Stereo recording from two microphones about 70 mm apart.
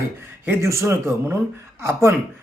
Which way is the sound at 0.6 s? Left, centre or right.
Right.